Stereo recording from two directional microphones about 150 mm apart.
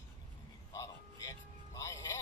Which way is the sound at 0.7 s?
20° left (ahead or behind).